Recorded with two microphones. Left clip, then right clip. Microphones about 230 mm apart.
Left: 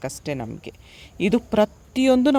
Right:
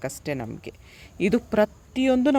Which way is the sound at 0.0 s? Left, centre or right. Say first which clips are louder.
Left 1 dB; centre.